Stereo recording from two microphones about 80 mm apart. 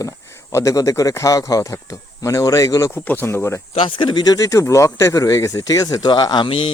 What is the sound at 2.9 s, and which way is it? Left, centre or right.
Speech, left.